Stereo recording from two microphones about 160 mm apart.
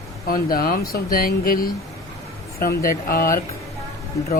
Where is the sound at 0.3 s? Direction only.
65° left (ahead or behind).